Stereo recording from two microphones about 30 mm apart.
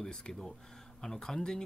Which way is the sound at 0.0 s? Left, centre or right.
Centre.